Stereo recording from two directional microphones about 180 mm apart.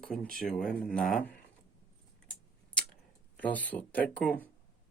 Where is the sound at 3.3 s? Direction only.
10° left (ahead or behind).